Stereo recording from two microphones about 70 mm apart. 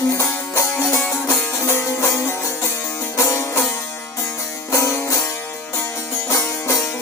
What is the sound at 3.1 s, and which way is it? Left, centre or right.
Music, left.